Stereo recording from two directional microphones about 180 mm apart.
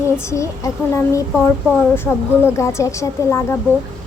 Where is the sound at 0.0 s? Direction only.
15° left (ahead or behind).